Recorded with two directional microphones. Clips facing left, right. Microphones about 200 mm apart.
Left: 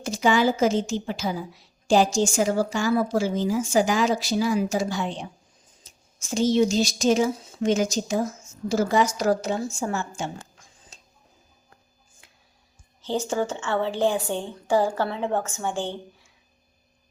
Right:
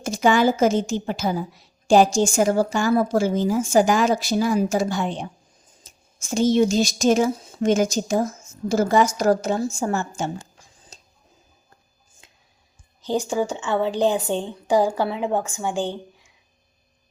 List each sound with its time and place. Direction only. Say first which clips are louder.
0.0 s a woman's voice: right 3 dB; 50° right (ahead or behind)
12.2 s music: right 3 dB; 20° right (ahead or behind)
13.1 s a woman's voice: right 3 dB; 15° right (ahead or behind)